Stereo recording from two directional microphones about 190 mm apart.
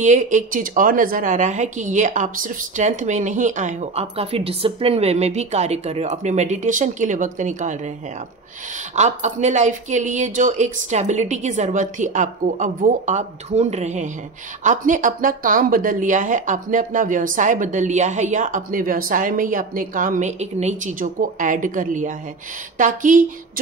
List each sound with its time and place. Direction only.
0.0 s a woman's voice: 40° right (ahead or behind)
8.9 s a woman's voice: 40° right (ahead or behind)